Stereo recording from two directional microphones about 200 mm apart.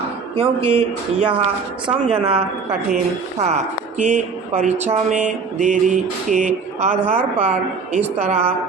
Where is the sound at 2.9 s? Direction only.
35° right (ahead or behind).